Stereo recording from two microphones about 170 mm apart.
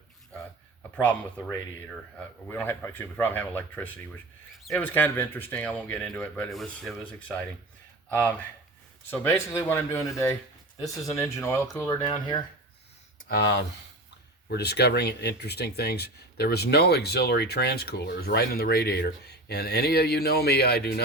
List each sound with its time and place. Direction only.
1.0 s speech: 10° left (ahead or behind)
9.0 s speech: 15° left (ahead or behind)
14.5 s speech: 75° left (ahead or behind)